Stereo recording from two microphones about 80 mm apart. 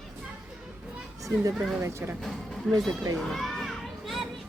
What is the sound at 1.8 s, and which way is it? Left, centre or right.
Speech, right.